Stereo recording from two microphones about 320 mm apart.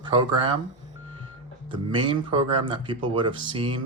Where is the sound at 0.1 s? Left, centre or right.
Centre.